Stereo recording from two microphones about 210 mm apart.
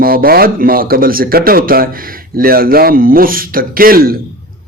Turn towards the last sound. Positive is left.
turn(degrees=-45)  # may be behind; listen again after turning